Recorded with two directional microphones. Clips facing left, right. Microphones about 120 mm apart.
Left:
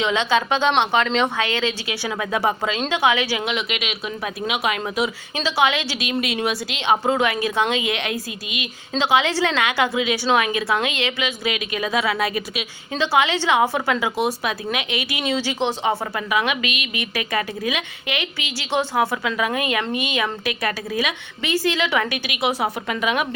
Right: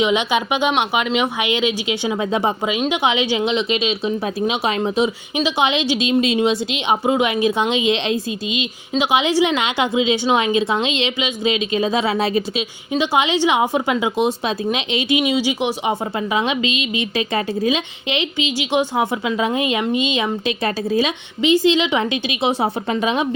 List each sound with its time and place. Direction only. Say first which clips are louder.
0.0 s speech: right 2 dB; 15° right (ahead or behind)
16.1 s speech: right 2 dB; 25° right (ahead or behind)